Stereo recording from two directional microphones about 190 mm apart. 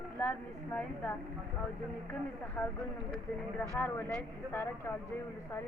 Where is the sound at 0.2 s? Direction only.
10° left (ahead or behind).